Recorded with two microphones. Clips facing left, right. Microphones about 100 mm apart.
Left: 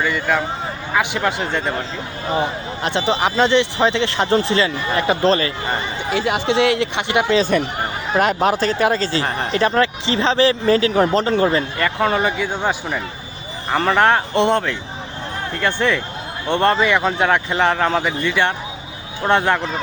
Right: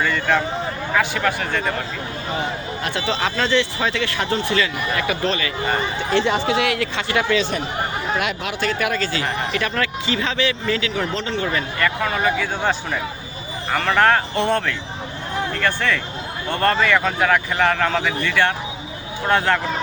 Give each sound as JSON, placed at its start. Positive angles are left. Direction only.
{"t": 0.0, "sound": "speech", "side_deg": 10}
{"t": 0.9, "sound": "speech", "side_deg": 20}
{"t": 2.8, "sound": "speech", "side_deg": 20}
{"t": 6.1, "sound": "speech", "side_deg": 5}
{"t": 6.4, "sound": "speech", "side_deg": 25}
{"t": 8.1, "sound": "speech", "side_deg": 40}
{"t": 11.5, "sound": "speech", "side_deg": 30}
{"t": 13.7, "sound": "speech", "side_deg": 25}